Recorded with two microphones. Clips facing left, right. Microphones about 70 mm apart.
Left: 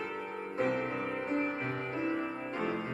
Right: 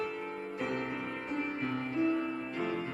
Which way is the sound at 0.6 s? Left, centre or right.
Left.